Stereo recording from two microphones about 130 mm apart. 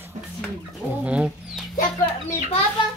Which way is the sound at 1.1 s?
10° right (ahead or behind).